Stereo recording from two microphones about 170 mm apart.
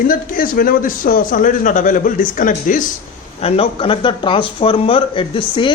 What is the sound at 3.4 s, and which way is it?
Speech, 35° left (ahead or behind).